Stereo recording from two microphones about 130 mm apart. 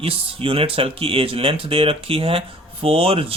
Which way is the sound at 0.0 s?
45° right (ahead or behind).